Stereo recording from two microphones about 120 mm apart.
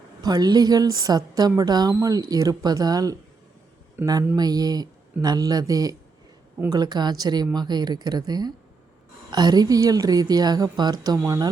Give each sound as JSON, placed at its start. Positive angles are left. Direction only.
{"t": 0.2, "sound": "a woman's voice", "side_deg": -35}
{"t": 4.4, "sound": "a woman's voice", "side_deg": -35}